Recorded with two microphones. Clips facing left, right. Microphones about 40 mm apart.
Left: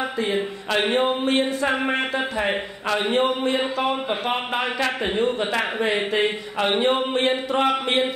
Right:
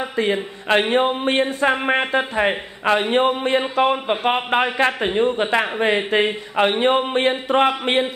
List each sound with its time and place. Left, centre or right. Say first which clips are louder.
0.7 s a man's voice: right 4 dB; right
3.9 s a man's voice: right 4 dB; right
5.8 s a man's voice: right 2 dB; right